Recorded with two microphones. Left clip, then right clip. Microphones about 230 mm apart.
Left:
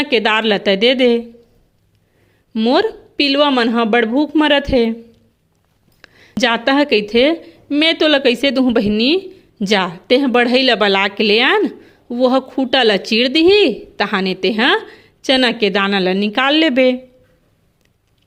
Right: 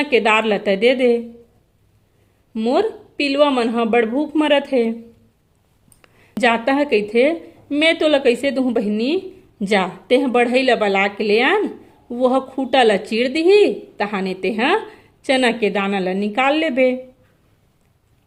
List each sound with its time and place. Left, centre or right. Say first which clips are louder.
0.0 s speech: left 1 dB; left
2.5 s speech: left 3 dB; left
6.0 s a sound: left 8 dB; left
6.4 s speech: left 2 dB; left